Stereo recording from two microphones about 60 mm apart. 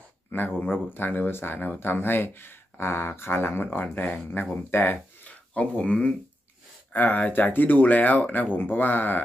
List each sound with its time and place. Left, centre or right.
0.3 s speech: left
5.5 s speech: left
6.9 s speech: left